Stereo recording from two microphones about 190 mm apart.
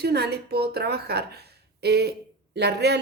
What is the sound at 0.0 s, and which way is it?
Speech, 60° right (ahead or behind).